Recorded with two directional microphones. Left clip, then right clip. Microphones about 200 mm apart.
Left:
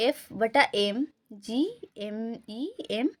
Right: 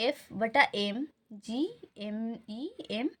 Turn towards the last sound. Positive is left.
turn(degrees=40)  # may be behind; listen again after turning